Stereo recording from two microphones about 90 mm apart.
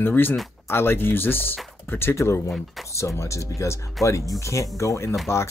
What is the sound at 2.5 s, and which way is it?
Speech, centre (ahead or behind).